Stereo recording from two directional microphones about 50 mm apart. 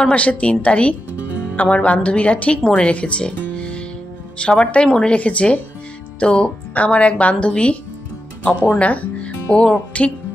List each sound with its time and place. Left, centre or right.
0.1 s speech: left
3.5 s music: left
4.4 s speech: left